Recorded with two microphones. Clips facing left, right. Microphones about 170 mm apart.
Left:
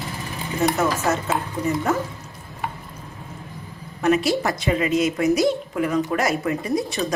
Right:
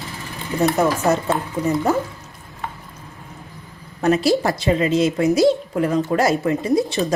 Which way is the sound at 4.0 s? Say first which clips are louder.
Right 3 dB; 35° right (ahead or behind).